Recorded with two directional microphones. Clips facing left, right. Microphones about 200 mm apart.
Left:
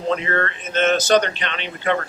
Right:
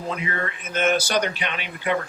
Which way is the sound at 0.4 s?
10° right (ahead or behind).